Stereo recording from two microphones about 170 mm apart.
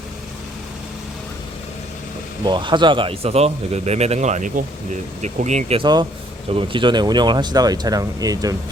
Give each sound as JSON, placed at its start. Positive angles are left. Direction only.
{"t": 2.4, "sound": "speech", "side_deg": -25}
{"t": 5.8, "sound": "speech", "side_deg": -25}